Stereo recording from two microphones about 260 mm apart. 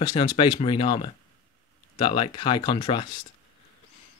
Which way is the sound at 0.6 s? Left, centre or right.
Centre.